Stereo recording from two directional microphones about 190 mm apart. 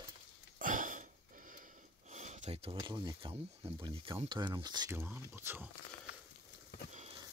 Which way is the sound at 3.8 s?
25° right (ahead or behind).